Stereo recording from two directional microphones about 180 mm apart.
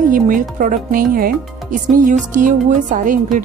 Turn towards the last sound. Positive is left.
turn(degrees=-45)  # may be behind; listen again after turning